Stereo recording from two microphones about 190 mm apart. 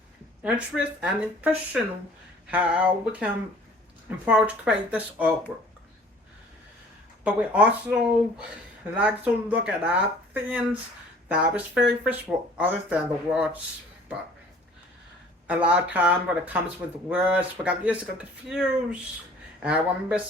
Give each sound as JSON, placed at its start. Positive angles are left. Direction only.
{"t": 0.4, "sound": "speech", "side_deg": -5}
{"t": 7.3, "sound": "speech", "side_deg": -5}
{"t": 15.4, "sound": "speech", "side_deg": -5}